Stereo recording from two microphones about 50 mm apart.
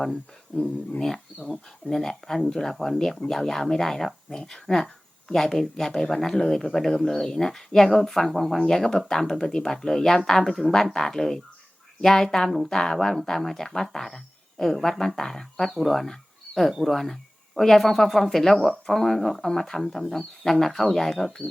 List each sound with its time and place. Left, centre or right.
0.1 s speech: centre